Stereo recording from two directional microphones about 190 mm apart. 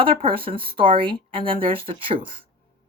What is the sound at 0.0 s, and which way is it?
Speech, 30° right (ahead or behind).